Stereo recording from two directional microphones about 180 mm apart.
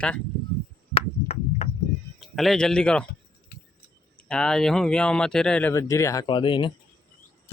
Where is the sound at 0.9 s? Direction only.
35° left (ahead or behind).